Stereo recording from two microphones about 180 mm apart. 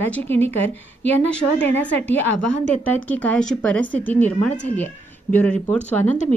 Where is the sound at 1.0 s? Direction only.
85° left.